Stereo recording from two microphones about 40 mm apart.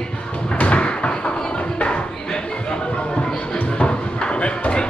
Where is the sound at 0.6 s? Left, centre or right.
Left.